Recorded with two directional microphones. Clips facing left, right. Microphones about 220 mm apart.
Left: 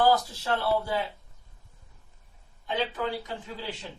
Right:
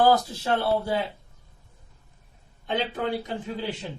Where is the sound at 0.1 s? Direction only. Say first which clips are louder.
Right 3 dB; 25° right (ahead or behind).